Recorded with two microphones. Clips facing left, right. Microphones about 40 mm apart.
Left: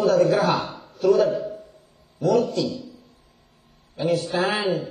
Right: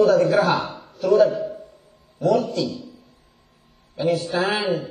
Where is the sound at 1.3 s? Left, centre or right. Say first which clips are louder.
Right 1 dB; right.